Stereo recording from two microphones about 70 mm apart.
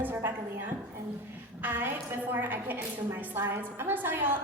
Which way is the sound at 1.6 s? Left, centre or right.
Right.